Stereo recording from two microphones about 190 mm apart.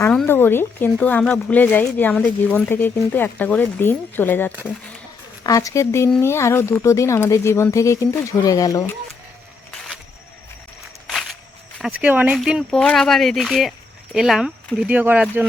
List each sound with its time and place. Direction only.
0.0 s speech: 10° left (ahead or behind)
11.0 s walk: centre (ahead or behind)
11.8 s speech: 5° right (ahead or behind)